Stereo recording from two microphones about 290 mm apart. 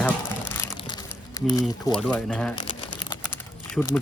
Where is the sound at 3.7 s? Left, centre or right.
Centre.